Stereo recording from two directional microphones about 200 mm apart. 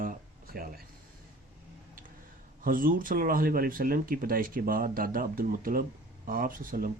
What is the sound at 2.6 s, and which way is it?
Speech, 45° right (ahead or behind).